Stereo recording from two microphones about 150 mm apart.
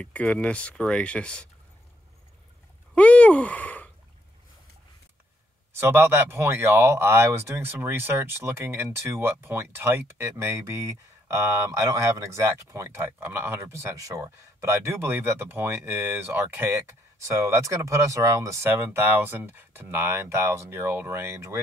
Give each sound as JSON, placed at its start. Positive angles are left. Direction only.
{"t": 0.0, "sound": "speech", "side_deg": 10}
{"t": 2.9, "sound": "a sound", "side_deg": 10}
{"t": 5.7, "sound": "speech", "side_deg": -15}